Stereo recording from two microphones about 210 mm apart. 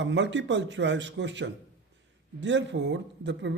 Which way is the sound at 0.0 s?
60° right (ahead or behind).